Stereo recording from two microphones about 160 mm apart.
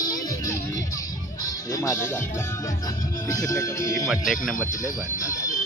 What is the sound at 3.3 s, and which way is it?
Music, 20° left (ahead or behind).